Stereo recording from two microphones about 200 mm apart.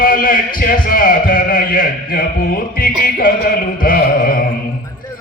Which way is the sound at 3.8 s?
45° left (ahead or behind).